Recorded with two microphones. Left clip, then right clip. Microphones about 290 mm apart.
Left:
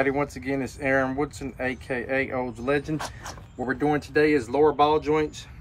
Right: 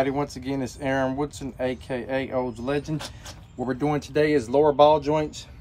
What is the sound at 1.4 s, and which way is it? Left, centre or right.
Speech, right.